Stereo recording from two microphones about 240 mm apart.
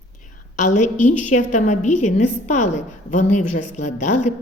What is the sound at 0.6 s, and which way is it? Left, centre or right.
A woman's voice, left.